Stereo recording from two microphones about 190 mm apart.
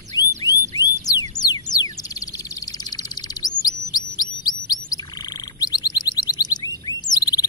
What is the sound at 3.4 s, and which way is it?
Chirp, 20° left (ahead or behind).